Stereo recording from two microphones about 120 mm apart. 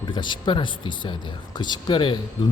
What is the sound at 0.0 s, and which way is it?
Speech, 40° left (ahead or behind).